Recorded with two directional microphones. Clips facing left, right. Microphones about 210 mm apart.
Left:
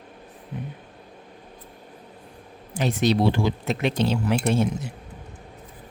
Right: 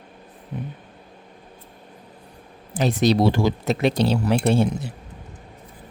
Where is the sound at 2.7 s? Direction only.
35° right (ahead or behind).